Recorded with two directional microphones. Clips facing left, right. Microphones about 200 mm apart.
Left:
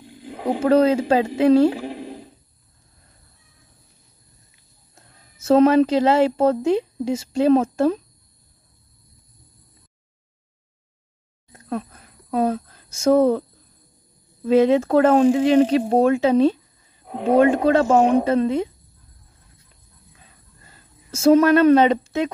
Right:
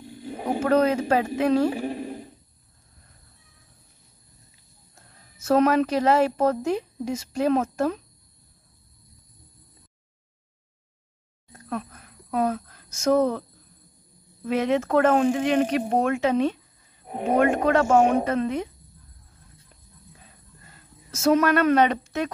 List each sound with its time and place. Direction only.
0.6 s a woman's voice: 30° left (ahead or behind)
5.4 s a woman's voice: 25° left (ahead or behind)
11.5 s a sound: 30° left (ahead or behind)
14.4 s a woman's voice: 30° left (ahead or behind)
20.7 s speech: 30° left (ahead or behind)